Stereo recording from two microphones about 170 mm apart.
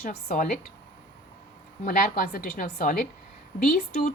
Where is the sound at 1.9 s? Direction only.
55° left (ahead or behind).